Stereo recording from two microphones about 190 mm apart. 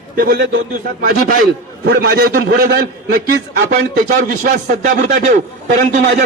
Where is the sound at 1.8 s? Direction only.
55° right (ahead or behind).